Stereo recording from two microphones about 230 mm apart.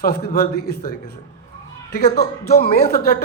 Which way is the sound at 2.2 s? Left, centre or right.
Left.